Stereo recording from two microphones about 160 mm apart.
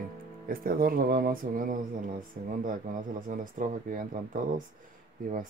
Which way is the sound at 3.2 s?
60° right (ahead or behind).